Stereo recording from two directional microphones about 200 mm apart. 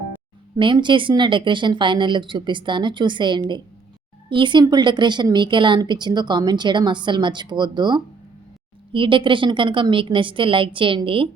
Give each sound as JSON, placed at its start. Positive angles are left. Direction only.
{"t": 0.5, "sound": "speech", "side_deg": -25}